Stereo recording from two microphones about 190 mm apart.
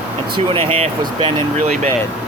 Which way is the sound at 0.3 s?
30° right (ahead or behind).